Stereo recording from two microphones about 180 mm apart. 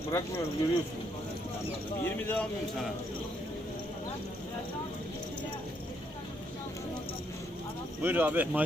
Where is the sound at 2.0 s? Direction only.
10° left (ahead or behind).